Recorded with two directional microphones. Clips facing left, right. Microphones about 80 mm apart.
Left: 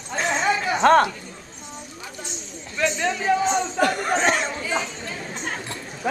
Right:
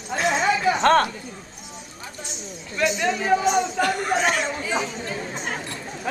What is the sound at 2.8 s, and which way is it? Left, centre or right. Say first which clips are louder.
Speech: right 1 dB; centre.